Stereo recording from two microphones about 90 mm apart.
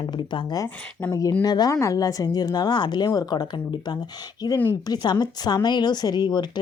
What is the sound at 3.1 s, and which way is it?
Speech, 45° left (ahead or behind).